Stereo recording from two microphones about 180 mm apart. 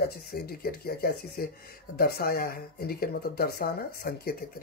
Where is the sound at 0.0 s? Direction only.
60° left (ahead or behind).